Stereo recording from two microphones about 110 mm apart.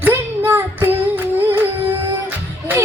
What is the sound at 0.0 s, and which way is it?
Child singing, 20° right (ahead or behind).